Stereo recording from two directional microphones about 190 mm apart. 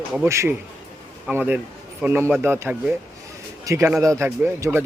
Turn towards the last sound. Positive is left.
turn(degrees=-10)  # may be behind; listen again after turning